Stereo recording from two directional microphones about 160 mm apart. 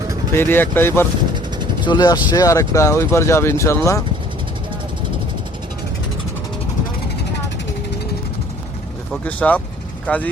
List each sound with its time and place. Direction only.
0.3 s speech: 15° left (ahead or behind)
1.8 s speech: 30° left (ahead or behind)
9.2 s speech: 10° left (ahead or behind)